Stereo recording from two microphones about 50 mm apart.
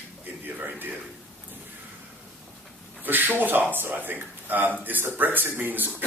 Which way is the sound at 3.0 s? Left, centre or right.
Right.